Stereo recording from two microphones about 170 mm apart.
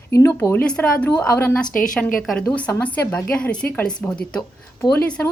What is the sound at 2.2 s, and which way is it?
A woman's voice, centre (ahead or behind).